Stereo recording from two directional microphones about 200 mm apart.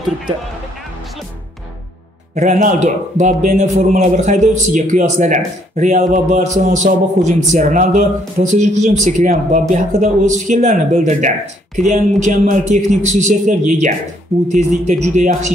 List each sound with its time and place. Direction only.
2.3 s a man's voice: 40° right (ahead or behind)